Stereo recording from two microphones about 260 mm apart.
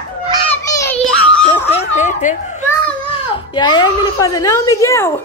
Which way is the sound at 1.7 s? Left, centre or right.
Left.